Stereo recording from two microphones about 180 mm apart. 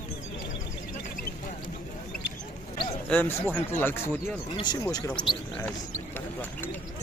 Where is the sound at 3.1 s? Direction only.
10° left (ahead or behind).